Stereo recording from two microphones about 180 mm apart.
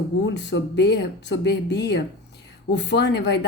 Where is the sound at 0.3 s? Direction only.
75° left (ahead or behind).